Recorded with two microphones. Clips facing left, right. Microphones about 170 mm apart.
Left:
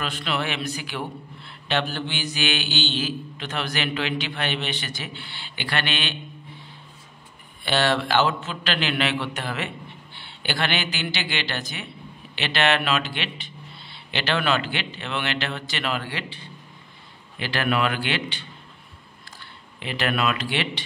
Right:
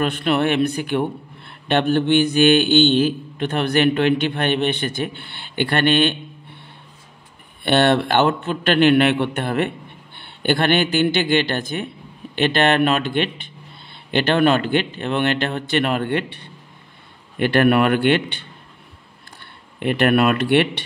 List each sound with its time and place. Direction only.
0.0 s a man's voice: 55° right (ahead or behind)
19.8 s a man's voice: 55° right (ahead or behind)